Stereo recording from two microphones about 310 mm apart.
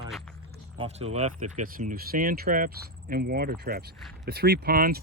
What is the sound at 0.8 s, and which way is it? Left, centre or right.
Speech, centre.